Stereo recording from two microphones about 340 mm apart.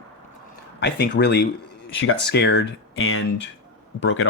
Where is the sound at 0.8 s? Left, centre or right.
Left.